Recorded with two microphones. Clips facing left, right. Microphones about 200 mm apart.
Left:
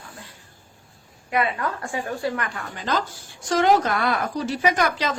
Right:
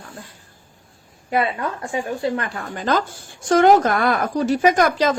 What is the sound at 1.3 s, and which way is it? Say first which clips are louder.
A woman's voice: right 2 dB; 25° right (ahead or behind).